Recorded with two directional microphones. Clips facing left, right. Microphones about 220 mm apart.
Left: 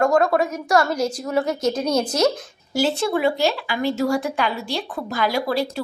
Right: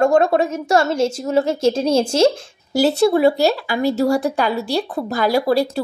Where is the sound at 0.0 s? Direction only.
25° right (ahead or behind).